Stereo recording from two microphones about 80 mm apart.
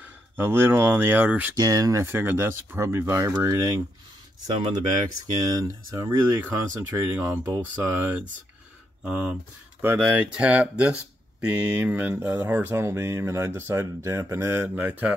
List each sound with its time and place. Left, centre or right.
0.0 s speech: right
1.6 s speech: right
2.0 s speech: right
5.4 s speech: right
6.0 s speech: right
9.0 s speech: centre
12.7 s speech: right